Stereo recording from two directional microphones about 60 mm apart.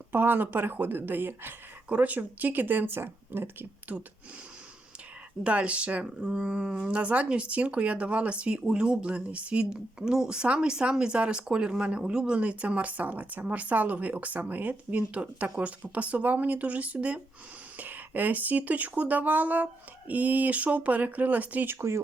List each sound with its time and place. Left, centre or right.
0.1 s speech: right
5.4 s speech: right